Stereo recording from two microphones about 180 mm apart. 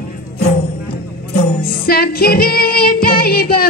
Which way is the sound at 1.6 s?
55° left (ahead or behind).